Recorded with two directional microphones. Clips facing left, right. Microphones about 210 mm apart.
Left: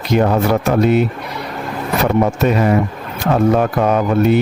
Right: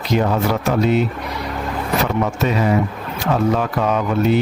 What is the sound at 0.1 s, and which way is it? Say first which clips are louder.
Speech: left 4 dB; 50° left (ahead or behind).